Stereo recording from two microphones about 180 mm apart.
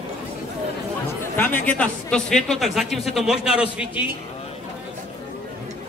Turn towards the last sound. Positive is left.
turn(degrees=-5)  # may be behind; listen again after turning